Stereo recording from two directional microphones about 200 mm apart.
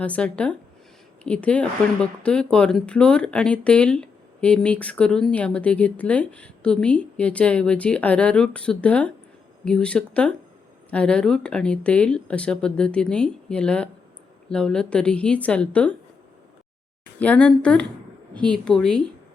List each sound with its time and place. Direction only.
0.0 s speech: 5° left (ahead or behind)
17.2 s speech: 5° left (ahead or behind)